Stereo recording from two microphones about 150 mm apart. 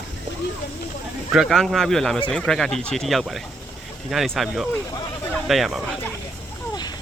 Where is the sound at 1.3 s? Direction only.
Centre (ahead or behind).